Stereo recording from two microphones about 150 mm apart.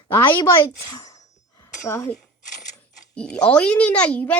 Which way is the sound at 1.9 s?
15° left (ahead or behind).